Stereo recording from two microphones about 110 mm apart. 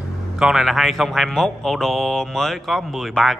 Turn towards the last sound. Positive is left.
turn(degrees=0)  # may be behind; listen again after turning